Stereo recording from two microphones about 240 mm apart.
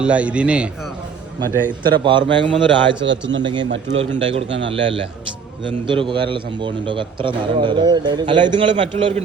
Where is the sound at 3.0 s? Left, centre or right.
Right.